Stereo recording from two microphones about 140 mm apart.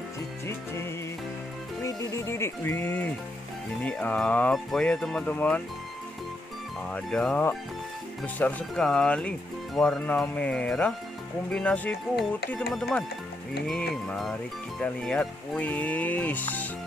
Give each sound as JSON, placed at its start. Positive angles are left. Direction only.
{"t": 0.5, "sound": "music", "side_deg": 20}
{"t": 3.8, "sound": "speech", "side_deg": 10}
{"t": 6.9, "sound": "speech", "side_deg": 5}